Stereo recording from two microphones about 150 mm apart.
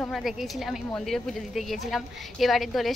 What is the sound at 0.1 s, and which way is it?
A woman's voice, centre (ahead or behind).